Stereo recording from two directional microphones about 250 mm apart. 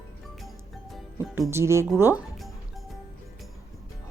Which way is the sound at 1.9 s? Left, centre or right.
Centre.